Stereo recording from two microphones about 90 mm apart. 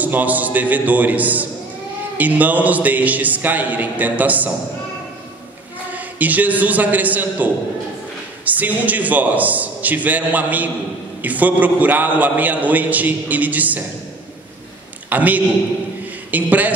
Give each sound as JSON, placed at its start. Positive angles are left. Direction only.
{"t": 0.0, "sound": "a man's voice", "side_deg": -20}
{"t": 5.9, "sound": "a man's voice", "side_deg": -20}
{"t": 15.0, "sound": "a man's voice", "side_deg": -20}